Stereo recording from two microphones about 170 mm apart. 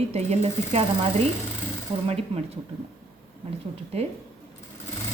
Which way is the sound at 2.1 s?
35° right (ahead or behind).